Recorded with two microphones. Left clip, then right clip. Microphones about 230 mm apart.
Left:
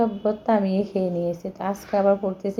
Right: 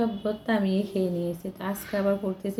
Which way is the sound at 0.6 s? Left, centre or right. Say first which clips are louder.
Left 4 dB; left.